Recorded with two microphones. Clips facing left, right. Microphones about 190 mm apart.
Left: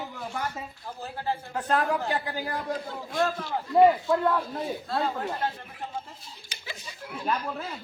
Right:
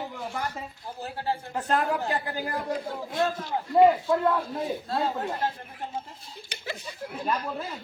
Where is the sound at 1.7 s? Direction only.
Centre (ahead or behind).